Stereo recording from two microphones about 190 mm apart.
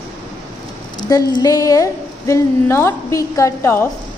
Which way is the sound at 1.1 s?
20° left (ahead or behind).